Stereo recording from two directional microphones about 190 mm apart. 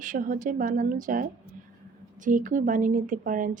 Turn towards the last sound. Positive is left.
turn(degrees=-45)  # may be behind; listen again after turning